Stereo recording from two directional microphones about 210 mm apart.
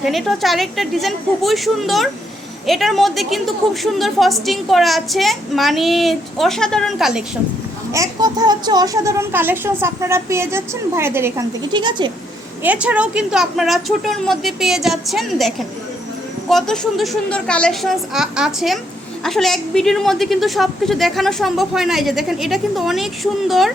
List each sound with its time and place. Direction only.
0.0 s a woman's voice: centre (ahead or behind)
7.9 s a child's voice: 15° right (ahead or behind)
12.6 s a woman's voice: 5° right (ahead or behind)